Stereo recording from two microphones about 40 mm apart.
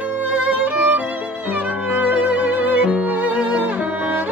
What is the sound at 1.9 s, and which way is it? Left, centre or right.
Music, right.